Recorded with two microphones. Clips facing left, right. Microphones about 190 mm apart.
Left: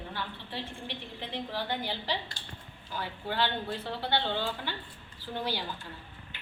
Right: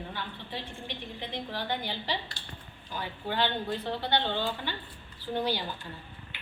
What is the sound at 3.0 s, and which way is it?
A woman's voice, 5° left (ahead or behind).